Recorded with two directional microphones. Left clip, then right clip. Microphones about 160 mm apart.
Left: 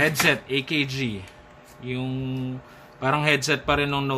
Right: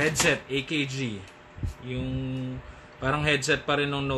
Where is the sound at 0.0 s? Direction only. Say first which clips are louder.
Left 3 dB; 50° left (ahead or behind).